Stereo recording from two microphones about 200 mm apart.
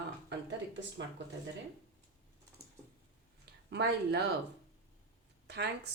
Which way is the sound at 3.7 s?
55° right (ahead or behind).